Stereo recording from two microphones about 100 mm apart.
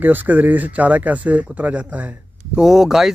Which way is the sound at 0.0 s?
15° right (ahead or behind).